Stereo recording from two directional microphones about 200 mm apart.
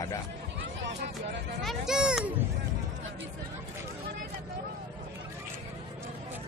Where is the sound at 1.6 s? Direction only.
Centre (ahead or behind).